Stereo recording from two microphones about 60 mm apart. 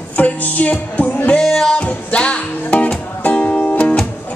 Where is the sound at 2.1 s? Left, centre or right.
Centre.